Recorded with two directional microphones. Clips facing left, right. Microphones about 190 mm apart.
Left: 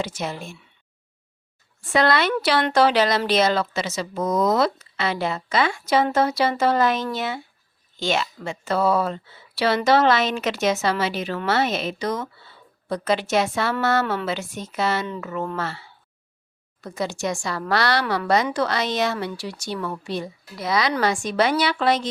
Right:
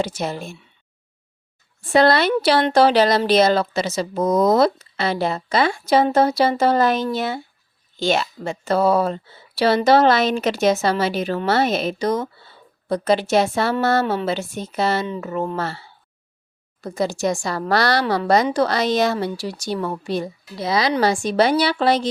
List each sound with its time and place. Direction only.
0.0 s speech: 35° right (ahead or behind)
1.8 s speech: 35° right (ahead or behind)
20.6 s speech: 30° right (ahead or behind)